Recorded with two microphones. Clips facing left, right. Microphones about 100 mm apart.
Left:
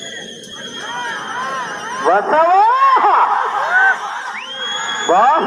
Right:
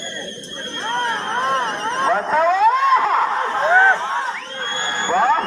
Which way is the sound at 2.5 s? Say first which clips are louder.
Left 3 dB; 40° left (ahead or behind).